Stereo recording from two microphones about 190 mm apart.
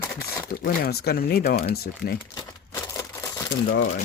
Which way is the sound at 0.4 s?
55° left (ahead or behind).